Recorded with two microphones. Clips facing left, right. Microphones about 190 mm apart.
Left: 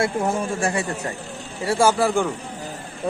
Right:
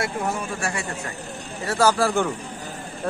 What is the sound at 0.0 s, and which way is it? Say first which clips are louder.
Speech: left 4 dB; 30° left (ahead or behind).